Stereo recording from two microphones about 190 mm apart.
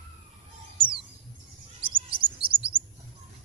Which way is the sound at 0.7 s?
25° right (ahead or behind).